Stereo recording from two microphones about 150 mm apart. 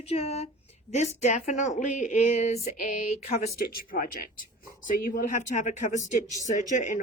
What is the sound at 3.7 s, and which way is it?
Speech, 70° left (ahead or behind).